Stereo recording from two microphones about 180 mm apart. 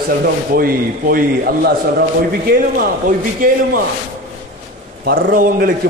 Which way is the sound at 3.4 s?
50° right (ahead or behind).